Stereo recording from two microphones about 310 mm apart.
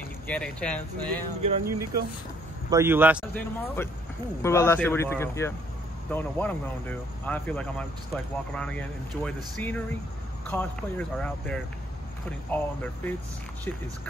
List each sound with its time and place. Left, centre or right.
0.3 s speech: centre
1.6 s speech: right
2.7 s speech: centre